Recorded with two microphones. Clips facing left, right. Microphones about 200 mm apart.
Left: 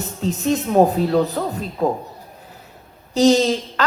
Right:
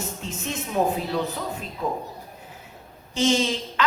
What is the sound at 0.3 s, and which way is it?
Speech, 40° left (ahead or behind).